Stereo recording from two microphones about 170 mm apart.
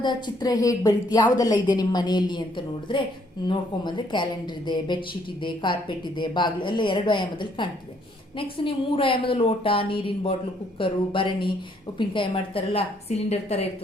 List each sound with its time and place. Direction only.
0.0 s a woman's voice: 25° left (ahead or behind)